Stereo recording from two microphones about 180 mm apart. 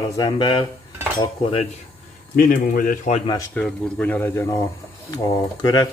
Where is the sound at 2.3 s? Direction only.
55° left (ahead or behind).